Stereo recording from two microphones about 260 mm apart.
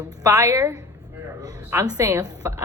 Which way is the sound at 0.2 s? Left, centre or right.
Centre.